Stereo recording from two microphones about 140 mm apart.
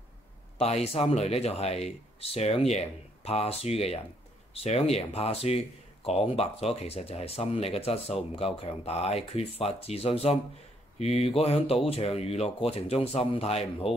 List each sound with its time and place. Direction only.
0.6 s speech: 50° left (ahead or behind)